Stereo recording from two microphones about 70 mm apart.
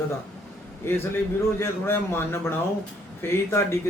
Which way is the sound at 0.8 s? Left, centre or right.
Left.